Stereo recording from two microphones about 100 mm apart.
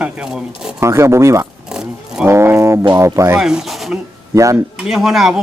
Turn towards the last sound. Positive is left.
turn(degrees=-5)  # may be behind; listen again after turning